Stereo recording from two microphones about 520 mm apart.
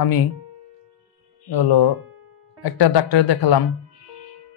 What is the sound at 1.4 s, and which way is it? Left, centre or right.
Speech, left.